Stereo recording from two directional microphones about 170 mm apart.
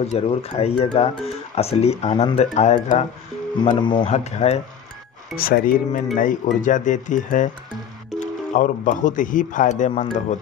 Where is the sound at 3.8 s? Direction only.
25° left (ahead or behind).